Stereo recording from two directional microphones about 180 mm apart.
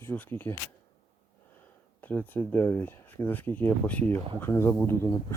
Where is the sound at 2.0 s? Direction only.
10° left (ahead or behind).